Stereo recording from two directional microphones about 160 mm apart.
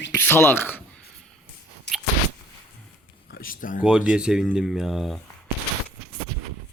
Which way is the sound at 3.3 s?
65° left (ahead or behind).